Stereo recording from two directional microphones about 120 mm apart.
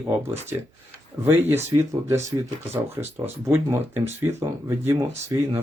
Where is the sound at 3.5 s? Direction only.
20° right (ahead or behind).